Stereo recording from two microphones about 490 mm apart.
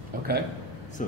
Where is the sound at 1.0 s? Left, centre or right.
Centre.